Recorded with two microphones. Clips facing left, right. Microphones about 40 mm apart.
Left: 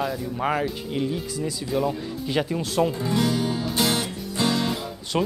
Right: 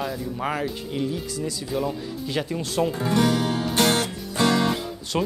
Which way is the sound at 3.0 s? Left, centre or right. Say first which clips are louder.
Right 2 dB; right.